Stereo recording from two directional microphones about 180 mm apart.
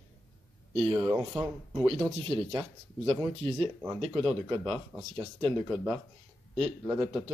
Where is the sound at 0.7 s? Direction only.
30° right (ahead or behind).